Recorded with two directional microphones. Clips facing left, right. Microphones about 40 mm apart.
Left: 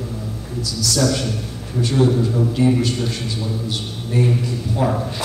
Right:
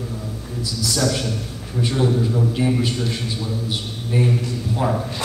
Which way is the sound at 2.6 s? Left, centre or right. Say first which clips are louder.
Left 3 dB; centre.